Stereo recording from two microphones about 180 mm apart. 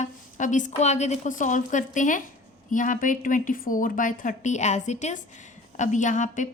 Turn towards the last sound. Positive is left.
turn(degrees=45)  # may be behind; listen again after turning